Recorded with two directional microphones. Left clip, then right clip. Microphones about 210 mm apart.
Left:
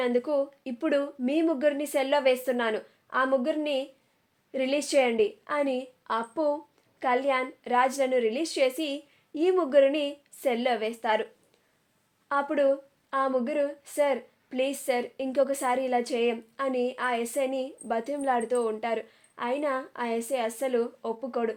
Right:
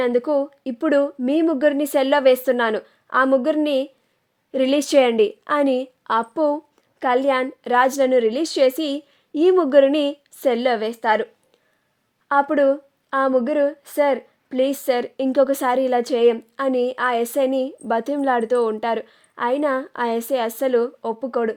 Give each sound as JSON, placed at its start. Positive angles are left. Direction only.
{"t": 0.0, "sound": "speech", "side_deg": -45}
{"t": 12.3, "sound": "speech", "side_deg": -45}